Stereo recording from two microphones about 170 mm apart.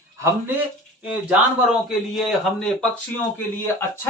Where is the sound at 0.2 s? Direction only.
15° right (ahead or behind).